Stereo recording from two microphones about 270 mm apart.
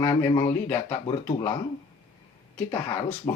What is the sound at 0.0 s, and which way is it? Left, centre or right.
Speech, centre.